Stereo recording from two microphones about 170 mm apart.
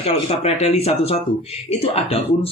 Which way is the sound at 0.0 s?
35° left (ahead or behind).